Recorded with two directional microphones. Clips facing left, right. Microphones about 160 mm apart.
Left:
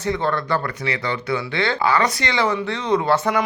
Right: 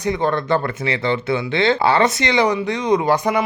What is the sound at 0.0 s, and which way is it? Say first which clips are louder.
Speech: right 2 dB; 15° right (ahead or behind).